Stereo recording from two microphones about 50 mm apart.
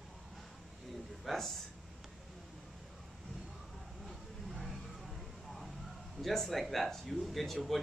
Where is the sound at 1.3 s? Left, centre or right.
Centre.